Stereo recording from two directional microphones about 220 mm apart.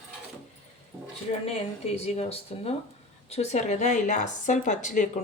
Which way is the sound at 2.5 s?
30° left (ahead or behind).